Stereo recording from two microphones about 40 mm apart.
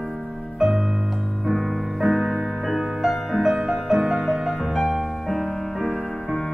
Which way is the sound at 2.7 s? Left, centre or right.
Centre.